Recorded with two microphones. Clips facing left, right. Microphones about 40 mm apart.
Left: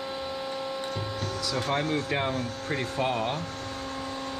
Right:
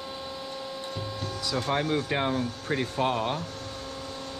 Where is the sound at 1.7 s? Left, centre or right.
Right.